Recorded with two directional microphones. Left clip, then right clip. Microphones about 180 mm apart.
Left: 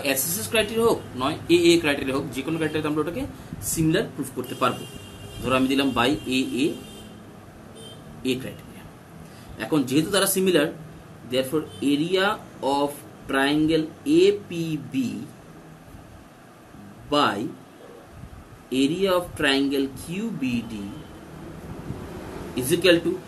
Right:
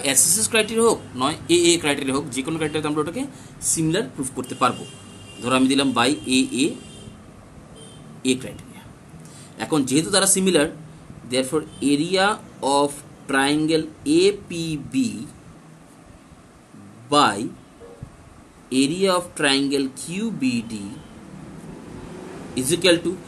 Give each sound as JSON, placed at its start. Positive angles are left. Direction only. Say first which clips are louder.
{"t": 0.0, "sound": "speech", "louder": "right 4 dB", "side_deg": -60}
{"t": 8.2, "sound": "speech", "louder": "right 4 dB", "side_deg": -50}
{"t": 9.6, "sound": "speech", "louder": "right 2 dB", "side_deg": -50}
{"t": 17.1, "sound": "speech", "louder": "right 4 dB", "side_deg": -50}
{"t": 18.7, "sound": "speech", "louder": "right 2 dB", "side_deg": -55}
{"t": 22.6, "sound": "speech", "louder": "right 1 dB", "side_deg": -45}